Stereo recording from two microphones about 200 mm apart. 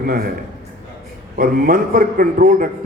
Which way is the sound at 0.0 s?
50° right (ahead or behind).